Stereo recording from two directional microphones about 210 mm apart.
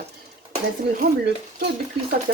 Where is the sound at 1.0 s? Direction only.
45° right (ahead or behind).